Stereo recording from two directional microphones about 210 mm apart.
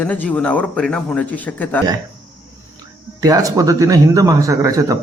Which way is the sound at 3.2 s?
15° right (ahead or behind).